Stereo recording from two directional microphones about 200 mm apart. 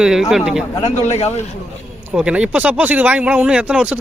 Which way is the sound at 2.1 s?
5° right (ahead or behind).